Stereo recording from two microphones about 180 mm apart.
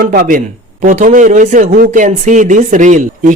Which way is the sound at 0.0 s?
55° right (ahead or behind).